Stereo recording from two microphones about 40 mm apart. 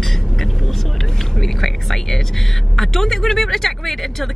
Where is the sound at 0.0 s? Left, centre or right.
Centre.